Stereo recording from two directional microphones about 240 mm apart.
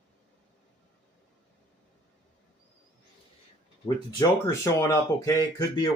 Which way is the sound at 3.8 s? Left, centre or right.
Centre.